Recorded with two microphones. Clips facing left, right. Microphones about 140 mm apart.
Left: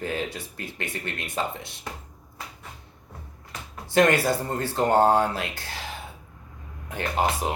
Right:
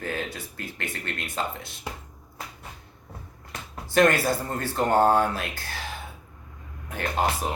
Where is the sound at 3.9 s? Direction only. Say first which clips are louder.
Even; 20° left (ahead or behind).